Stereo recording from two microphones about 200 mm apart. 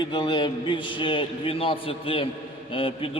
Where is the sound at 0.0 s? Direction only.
25° left (ahead or behind).